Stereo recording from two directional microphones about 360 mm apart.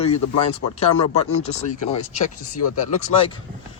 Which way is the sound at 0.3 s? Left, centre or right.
Left.